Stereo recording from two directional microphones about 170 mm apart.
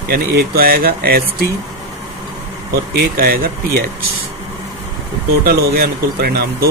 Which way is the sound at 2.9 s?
60° right (ahead or behind).